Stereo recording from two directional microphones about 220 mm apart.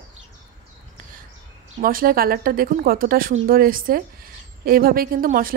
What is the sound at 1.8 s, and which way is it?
A woman's voice, 40° right (ahead or behind).